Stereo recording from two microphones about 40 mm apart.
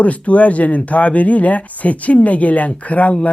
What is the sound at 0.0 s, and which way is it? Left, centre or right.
Speech, left.